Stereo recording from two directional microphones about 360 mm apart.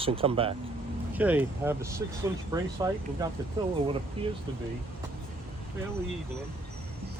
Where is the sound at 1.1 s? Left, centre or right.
Centre.